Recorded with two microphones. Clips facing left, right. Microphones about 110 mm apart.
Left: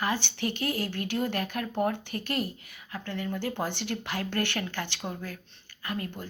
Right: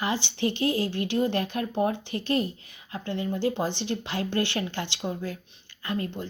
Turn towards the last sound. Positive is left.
turn(degrees=-25)  # may be behind; listen again after turning